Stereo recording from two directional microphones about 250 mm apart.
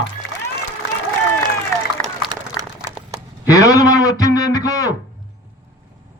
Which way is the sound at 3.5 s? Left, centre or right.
Centre.